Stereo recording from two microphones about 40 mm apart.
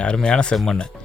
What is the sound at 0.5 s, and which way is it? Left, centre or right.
Speech, centre.